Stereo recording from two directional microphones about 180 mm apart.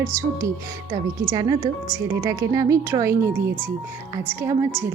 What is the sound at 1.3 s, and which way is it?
A woman's voice, 20° right (ahead or behind).